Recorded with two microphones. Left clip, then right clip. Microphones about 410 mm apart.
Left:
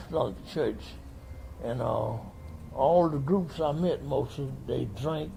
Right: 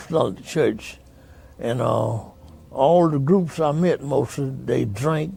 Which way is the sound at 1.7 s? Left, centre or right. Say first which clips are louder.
Right 8 dB; right.